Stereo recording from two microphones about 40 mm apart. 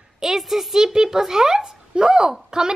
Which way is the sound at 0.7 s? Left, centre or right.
Centre.